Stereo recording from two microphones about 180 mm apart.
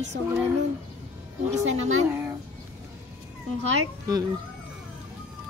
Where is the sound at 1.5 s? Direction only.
40° right (ahead or behind).